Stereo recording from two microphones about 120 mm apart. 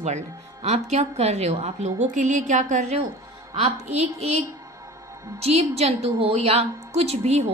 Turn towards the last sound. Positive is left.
turn(degrees=-65)  # may be behind; listen again after turning